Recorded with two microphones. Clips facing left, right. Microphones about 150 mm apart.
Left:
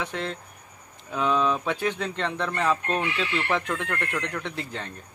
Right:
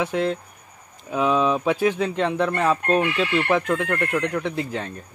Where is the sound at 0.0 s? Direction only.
10° right (ahead or behind).